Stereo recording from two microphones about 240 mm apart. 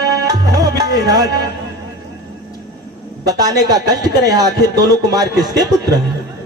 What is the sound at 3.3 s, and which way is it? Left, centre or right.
Speech, centre.